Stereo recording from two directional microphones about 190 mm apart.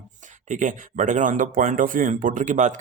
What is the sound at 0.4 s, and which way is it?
Speech, 40° right (ahead or behind).